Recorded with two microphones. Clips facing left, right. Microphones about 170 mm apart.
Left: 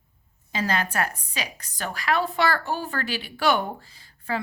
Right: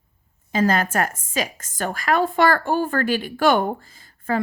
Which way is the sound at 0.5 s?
45° right (ahead or behind).